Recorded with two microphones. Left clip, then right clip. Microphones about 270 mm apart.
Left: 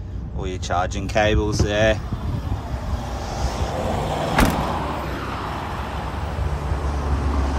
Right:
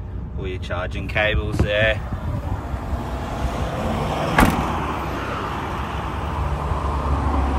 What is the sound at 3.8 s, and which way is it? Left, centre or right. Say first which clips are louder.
Vehicle: even; left.